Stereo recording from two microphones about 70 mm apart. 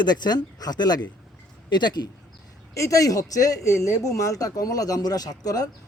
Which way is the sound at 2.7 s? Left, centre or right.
Left.